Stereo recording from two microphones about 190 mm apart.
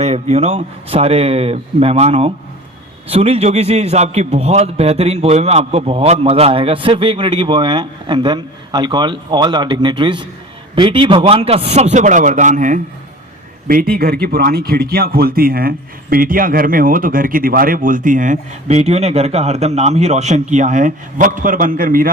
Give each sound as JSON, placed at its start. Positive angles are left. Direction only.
{"t": 0.0, "sound": "a man's voice", "side_deg": -35}